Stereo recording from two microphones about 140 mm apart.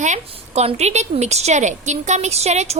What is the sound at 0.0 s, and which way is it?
A woman's voice, 55° right (ahead or behind).